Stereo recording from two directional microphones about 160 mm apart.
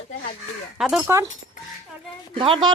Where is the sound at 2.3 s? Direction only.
30° right (ahead or behind).